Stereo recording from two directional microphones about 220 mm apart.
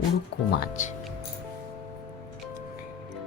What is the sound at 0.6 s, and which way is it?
Speech, 35° left (ahead or behind).